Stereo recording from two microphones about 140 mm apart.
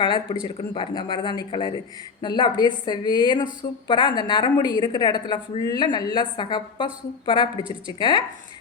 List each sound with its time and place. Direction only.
0.0 s a woman's voice: 35° left (ahead or behind)